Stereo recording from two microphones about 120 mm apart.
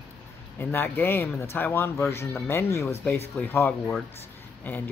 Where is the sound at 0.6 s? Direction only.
20° left (ahead or behind).